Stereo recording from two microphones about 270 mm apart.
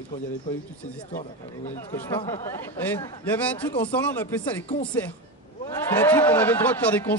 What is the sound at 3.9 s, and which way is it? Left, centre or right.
Speech, centre.